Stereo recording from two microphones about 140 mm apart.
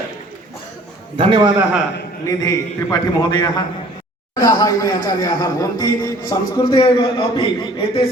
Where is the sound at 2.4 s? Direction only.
25° left (ahead or behind).